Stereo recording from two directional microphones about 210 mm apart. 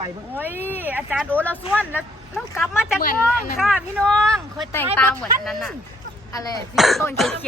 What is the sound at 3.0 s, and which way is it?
Speech, 40° left (ahead or behind).